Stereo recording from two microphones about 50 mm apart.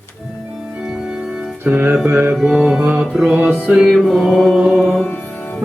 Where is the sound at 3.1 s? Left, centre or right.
Centre.